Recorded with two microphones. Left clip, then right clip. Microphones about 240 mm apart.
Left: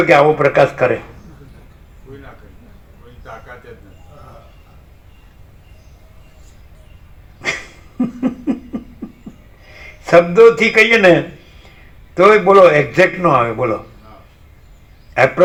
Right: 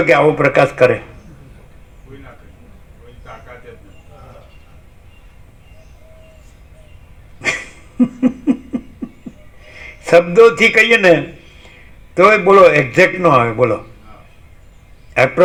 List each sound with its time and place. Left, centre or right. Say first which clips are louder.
0.1 s a man's voice: left 1 dB; right
7.4 s dog: right 2 dB; right
7.9 s laughter: right 4 dB; right
9.0 s a sound: right 3 dB; right
9.7 s a man's voice: even; right
12.1 s a man's voice: even; right